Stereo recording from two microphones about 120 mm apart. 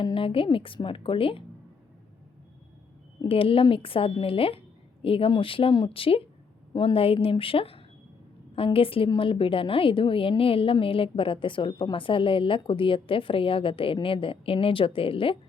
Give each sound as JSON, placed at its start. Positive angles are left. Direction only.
{"t": 0.0, "sound": "a woman's voice", "side_deg": 50}
{"t": 3.2, "sound": "a woman's voice", "side_deg": 50}